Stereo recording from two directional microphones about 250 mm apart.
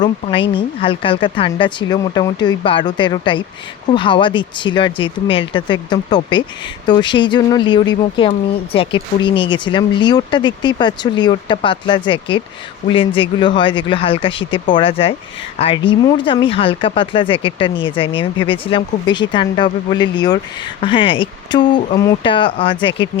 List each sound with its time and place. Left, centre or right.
0.0 s speech: centre